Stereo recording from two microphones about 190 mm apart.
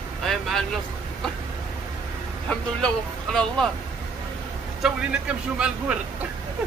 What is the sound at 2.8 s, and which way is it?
Speech, 5° left (ahead or behind).